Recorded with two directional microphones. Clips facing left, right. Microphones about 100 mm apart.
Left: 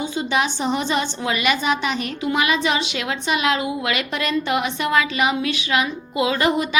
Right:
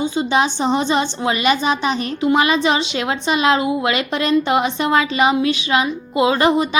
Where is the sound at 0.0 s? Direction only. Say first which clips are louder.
Right 4 dB; 25° right (ahead or behind).